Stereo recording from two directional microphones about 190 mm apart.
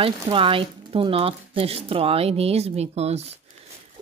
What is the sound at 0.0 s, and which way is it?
Speech, 30° right (ahead or behind).